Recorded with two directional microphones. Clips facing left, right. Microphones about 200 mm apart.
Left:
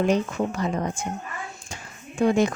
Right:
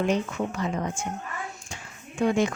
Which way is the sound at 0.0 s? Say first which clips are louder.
Left 3 dB; 35° left (ahead or behind).